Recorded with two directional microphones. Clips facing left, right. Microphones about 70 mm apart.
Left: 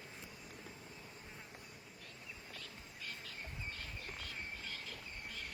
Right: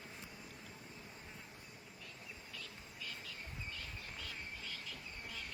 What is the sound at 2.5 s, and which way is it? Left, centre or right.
Cricket, left.